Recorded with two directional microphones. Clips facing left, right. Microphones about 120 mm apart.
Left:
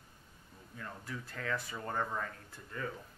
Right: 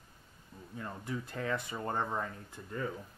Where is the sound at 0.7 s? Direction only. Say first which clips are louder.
Right 5 dB; 20° right (ahead or behind).